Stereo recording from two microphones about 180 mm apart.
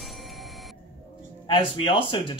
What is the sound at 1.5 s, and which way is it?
Speech, 30° left (ahead or behind).